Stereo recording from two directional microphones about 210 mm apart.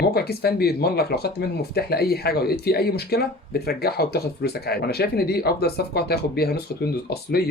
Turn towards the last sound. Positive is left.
turn(degrees=50)  # may be behind; listen again after turning